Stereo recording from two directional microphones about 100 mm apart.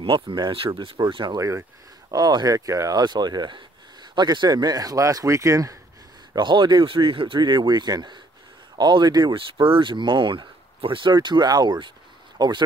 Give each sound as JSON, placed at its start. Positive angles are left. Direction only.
{"t": 0.0, "sound": "speech", "side_deg": -50}
{"t": 6.3, "sound": "speech", "side_deg": -50}